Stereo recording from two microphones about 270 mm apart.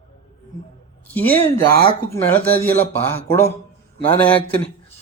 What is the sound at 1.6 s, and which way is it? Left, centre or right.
Speech, right.